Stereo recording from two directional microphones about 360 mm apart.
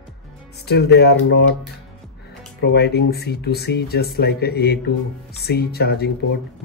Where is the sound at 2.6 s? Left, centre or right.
Left.